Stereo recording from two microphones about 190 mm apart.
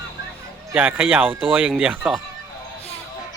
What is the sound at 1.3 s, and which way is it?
Speech, 30° right (ahead or behind).